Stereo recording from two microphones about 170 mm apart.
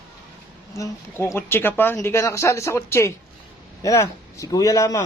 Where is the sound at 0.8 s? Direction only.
15° left (ahead or behind).